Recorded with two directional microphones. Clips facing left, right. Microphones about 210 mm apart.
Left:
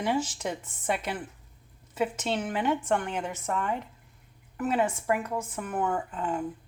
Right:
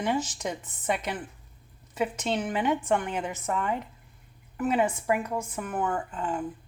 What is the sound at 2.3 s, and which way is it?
A woman's voice, 10° right (ahead or behind).